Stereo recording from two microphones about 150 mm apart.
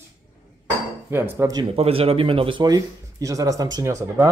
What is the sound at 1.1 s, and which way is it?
Speech, 15° right (ahead or behind).